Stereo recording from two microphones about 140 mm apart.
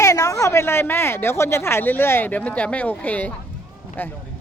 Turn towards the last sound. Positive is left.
turn(degrees=15)  # may be behind; listen again after turning